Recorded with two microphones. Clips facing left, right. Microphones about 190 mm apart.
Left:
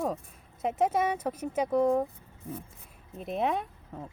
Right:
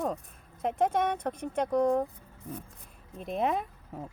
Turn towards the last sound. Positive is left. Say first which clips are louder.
# even
turn(degrees=0)  # may be behind; listen again after turning